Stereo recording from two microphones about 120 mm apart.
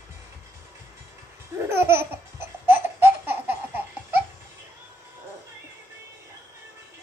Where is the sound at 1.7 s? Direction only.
20° right (ahead or behind).